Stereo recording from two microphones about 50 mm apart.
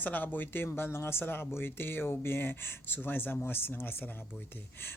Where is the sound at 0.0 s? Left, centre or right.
Left.